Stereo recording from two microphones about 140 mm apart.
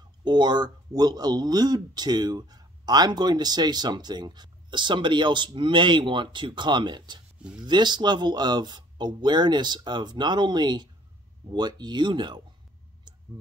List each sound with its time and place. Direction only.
0.2 s speech: 30° right (ahead or behind)